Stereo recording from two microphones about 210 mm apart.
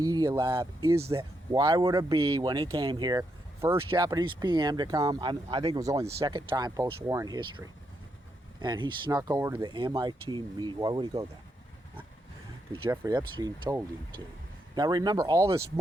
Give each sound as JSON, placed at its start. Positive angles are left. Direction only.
{"t": 0.0, "sound": "speech", "side_deg": -20}
{"t": 12.7, "sound": "speech", "side_deg": -20}